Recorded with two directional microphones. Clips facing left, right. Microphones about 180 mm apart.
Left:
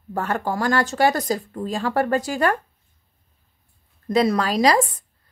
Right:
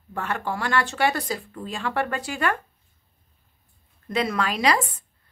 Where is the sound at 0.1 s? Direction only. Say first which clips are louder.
Left 4 dB; 40° left (ahead or behind).